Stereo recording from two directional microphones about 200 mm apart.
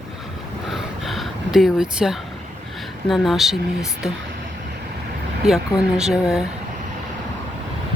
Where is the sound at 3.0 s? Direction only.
Centre (ahead or behind).